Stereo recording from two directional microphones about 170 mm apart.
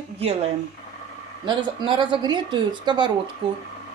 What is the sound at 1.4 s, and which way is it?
A woman's voice, 30° right (ahead or behind).